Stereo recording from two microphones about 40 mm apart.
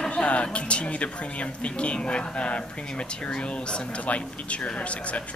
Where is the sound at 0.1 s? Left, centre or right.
Left.